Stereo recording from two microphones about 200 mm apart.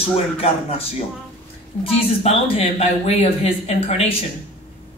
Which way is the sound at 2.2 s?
30° left (ahead or behind).